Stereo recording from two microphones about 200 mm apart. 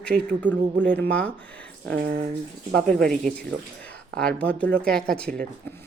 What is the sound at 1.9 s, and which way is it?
Speech, 55° right (ahead or behind).